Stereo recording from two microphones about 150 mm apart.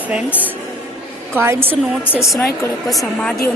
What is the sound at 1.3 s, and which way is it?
Speech, 15° right (ahead or behind).